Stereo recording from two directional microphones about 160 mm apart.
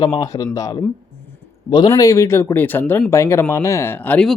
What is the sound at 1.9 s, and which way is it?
Speech, 20° left (ahead or behind).